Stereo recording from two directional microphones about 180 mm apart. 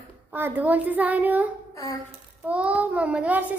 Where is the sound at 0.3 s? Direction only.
10° right (ahead or behind).